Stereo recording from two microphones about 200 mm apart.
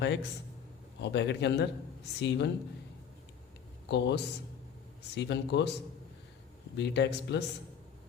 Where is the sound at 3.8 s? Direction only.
60° left (ahead or behind).